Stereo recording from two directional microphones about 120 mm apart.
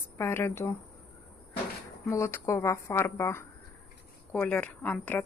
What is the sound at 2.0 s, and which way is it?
A woman's voice, 25° left (ahead or behind).